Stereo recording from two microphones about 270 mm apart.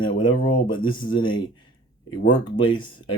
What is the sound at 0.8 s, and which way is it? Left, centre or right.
Speech, centre.